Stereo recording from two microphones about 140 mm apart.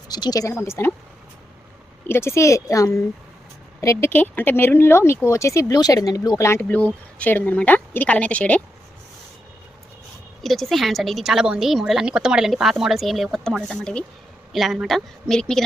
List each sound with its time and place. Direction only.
0.1 s speech: 30° left (ahead or behind)
2.0 s speech: 15° left (ahead or behind)
10.4 s speech: centre (ahead or behind)